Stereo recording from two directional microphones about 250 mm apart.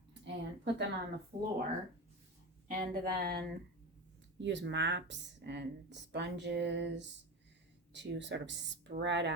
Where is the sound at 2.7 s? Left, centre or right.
Right.